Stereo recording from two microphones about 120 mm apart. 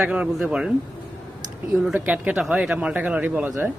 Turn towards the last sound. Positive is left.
turn(degrees=-15)  # may be behind; listen again after turning